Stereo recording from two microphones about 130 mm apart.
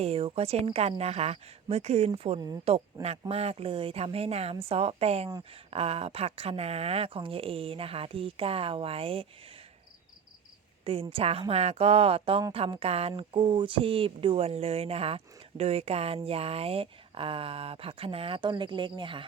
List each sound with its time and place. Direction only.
0.0 s speech: 45° right (ahead or behind)
11.1 s speech: 50° right (ahead or behind)